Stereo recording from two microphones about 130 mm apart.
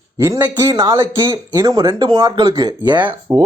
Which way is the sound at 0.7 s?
30° right (ahead or behind).